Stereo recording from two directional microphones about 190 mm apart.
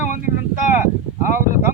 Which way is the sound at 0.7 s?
45° left (ahead or behind).